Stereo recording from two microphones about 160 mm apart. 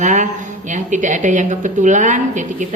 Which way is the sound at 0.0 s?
50° right (ahead or behind).